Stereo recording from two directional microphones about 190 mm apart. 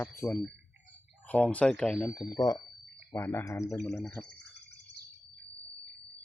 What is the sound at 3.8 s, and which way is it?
Speech, 5° left (ahead or behind).